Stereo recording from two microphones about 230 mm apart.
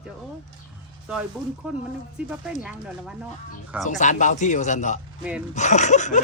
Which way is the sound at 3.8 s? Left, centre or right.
Left.